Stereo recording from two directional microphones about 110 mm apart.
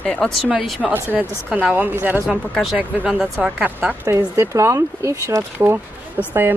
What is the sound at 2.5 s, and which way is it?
Speech, centre (ahead or behind).